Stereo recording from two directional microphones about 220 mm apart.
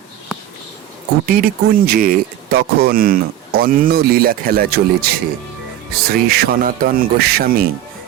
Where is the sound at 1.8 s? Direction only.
40° right (ahead or behind).